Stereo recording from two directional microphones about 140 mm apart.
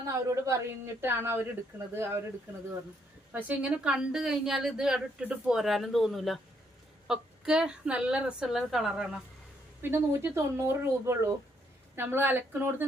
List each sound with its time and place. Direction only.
0.1 s speech: 20° right (ahead or behind)
3.3 s a woman's voice: 10° right (ahead or behind)
9.9 s speech: 20° right (ahead or behind)